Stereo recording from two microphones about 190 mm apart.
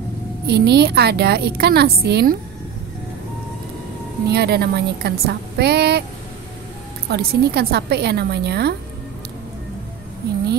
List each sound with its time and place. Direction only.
0.5 s a woman's voice: 60° right (ahead or behind)
4.3 s a woman's voice: 60° right (ahead or behind)
7.1 s a woman's voice: 60° right (ahead or behind)